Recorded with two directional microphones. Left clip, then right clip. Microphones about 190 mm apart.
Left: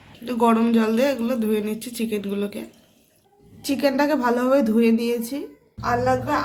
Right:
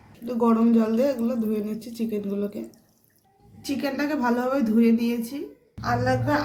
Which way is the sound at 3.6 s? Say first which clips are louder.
Left 7 dB; 20° left (ahead or behind).